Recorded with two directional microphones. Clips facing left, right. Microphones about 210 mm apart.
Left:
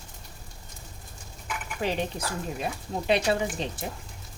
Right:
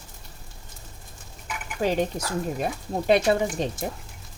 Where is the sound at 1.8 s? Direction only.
45° right (ahead or behind).